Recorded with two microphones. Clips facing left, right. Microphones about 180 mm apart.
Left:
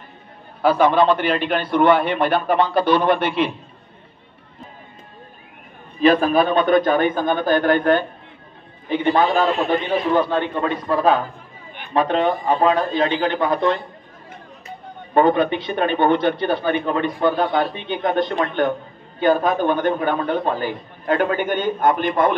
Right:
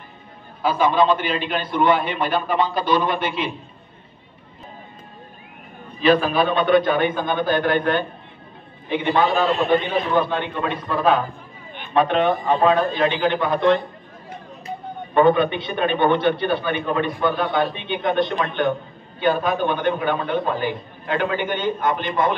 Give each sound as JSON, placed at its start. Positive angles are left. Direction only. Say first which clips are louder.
{"t": 0.6, "sound": "a man's voice", "louder": "left 3 dB", "side_deg": 65}
{"t": 5.9, "sound": "a man's voice", "louder": "left 2 dB", "side_deg": 45}
{"t": 15.1, "sound": "a man's voice", "louder": "even", "side_deg": 40}